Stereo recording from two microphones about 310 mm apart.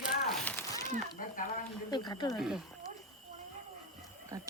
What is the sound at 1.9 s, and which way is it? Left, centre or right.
Speech, centre.